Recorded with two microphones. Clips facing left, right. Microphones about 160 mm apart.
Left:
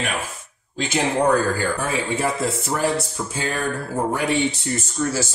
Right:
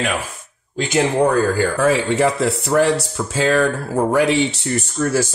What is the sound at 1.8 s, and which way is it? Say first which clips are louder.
Speech: right 8 dB; 90° right.